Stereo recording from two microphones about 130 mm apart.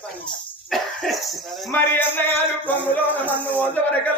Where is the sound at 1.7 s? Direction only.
15° left (ahead or behind).